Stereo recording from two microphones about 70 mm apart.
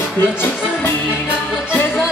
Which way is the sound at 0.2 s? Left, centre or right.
Left.